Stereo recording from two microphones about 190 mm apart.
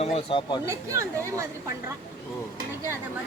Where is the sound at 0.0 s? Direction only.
30° left (ahead or behind).